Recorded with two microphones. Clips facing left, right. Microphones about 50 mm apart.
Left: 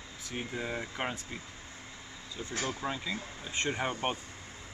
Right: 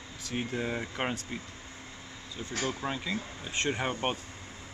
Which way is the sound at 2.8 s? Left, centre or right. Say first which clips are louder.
Right 1 dB; centre.